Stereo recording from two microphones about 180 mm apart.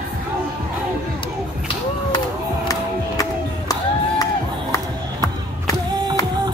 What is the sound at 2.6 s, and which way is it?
Crowd, 20° left (ahead or behind).